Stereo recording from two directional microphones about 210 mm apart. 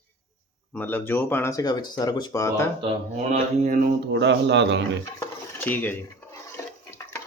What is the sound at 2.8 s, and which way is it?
Speech, 25° right (ahead or behind).